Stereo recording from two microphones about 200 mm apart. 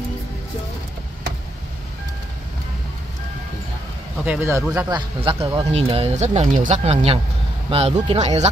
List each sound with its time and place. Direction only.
4.2 s speech: 10° right (ahead or behind); by 8.3 s 35° right (ahead or behind)